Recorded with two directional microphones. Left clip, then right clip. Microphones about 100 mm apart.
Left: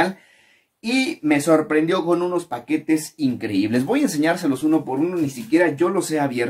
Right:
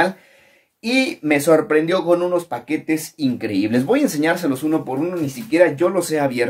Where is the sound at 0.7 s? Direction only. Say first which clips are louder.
Right 3 dB; 20° right (ahead or behind).